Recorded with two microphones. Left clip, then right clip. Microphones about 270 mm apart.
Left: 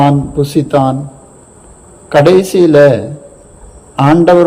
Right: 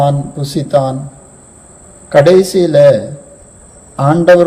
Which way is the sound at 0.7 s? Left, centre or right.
Left.